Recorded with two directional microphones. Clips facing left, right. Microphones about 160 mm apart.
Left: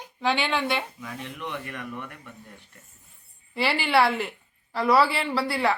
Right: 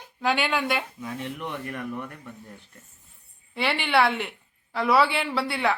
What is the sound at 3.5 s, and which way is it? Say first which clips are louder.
A woman's voice: left 1 dB; centre (ahead or behind).